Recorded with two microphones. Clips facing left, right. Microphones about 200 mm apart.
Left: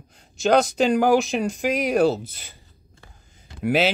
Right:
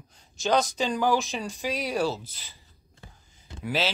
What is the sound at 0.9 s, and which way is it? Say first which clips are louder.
Speech: left 7 dB; 50° left (ahead or behind).